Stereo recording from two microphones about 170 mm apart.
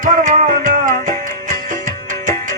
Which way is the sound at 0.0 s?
45° right (ahead or behind).